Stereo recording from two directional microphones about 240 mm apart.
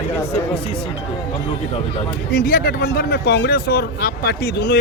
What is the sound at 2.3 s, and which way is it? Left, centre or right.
Speech, left.